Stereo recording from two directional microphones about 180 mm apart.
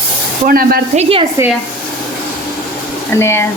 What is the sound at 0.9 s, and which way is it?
Speech, 35° right (ahead or behind).